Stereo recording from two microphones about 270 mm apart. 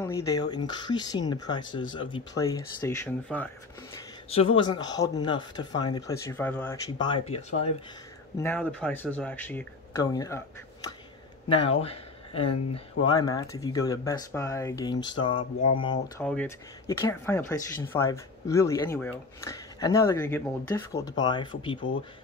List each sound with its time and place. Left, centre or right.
0.0 s speech: centre
4.6 s speech: centre
8.4 s speech: centre
11.4 s speech: left